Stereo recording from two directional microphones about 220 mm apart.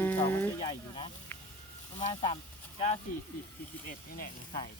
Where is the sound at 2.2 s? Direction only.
25° left (ahead or behind).